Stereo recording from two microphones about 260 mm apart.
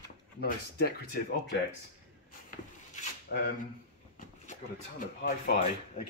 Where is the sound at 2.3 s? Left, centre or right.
Left.